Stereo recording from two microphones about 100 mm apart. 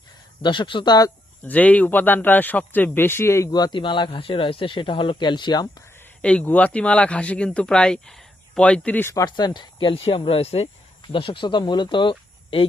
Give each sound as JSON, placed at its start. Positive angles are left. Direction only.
{"t": 0.4, "sound": "speech", "side_deg": 50}
{"t": 1.4, "sound": "speech", "side_deg": 15}
{"t": 3.5, "sound": "speech", "side_deg": 45}
{"t": 6.2, "sound": "speech", "side_deg": 15}
{"t": 9.1, "sound": "speech", "side_deg": 45}
{"t": 11.0, "sound": "speech", "side_deg": 60}